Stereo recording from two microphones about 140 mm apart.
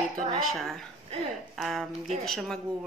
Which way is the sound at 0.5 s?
Centre (ahead or behind).